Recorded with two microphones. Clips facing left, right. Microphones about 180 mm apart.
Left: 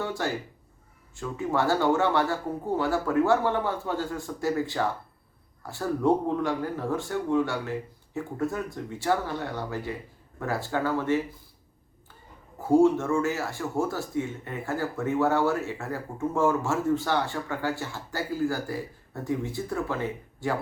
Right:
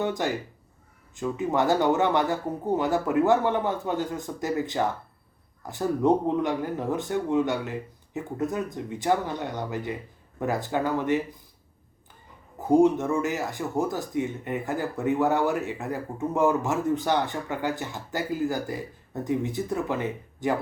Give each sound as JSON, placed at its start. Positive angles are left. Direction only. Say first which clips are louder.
{"t": 0.0, "sound": "speech", "louder": "right 3 dB", "side_deg": -20}
{"t": 12.5, "sound": "speech", "louder": "right 1 dB", "side_deg": -20}